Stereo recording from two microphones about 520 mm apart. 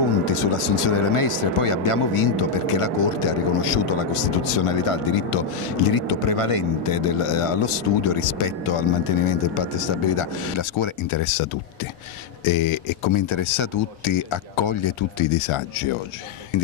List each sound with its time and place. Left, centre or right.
0.3 s speech: left
4.6 s speech: left
12.4 s speech: left